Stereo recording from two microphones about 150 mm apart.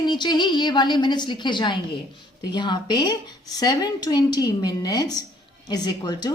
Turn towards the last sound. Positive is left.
turn(degrees=25)  # may be behind; listen again after turning